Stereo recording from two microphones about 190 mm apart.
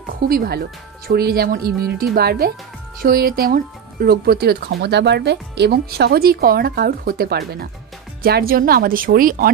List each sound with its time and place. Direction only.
0.3 s speech: 55° right (ahead or behind)